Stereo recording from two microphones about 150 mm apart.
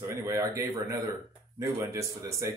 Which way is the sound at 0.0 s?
20° right (ahead or behind).